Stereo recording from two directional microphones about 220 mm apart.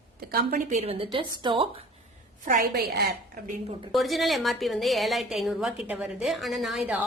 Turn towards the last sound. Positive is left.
turn(degrees=0)  # may be behind; listen again after turning